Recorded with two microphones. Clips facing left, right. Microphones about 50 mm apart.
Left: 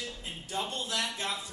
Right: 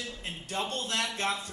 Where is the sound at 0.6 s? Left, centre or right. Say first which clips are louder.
Right 2 dB; right.